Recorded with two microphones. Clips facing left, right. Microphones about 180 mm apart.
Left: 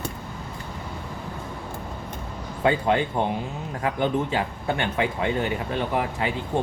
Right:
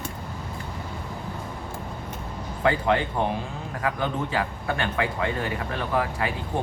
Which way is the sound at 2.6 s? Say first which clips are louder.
Left 1 dB; 25° left (ahead or behind).